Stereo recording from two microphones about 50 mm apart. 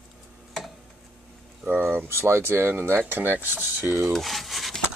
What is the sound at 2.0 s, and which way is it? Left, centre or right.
Speech, right.